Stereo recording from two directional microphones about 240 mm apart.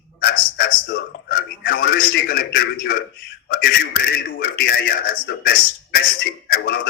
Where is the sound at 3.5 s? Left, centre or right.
Left.